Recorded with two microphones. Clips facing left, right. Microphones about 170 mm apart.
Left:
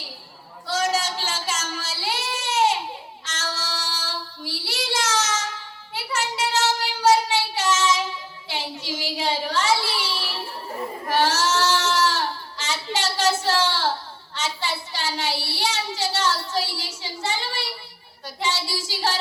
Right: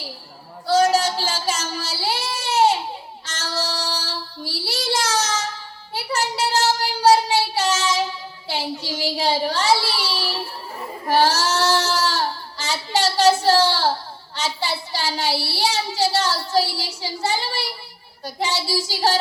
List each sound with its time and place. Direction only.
0.7 s child singing: 35° right (ahead or behind)
8.4 s a sound: 35° right (ahead or behind)
11.1 s goat: 35° right (ahead or behind)
14.3 s child singing: 35° right (ahead or behind)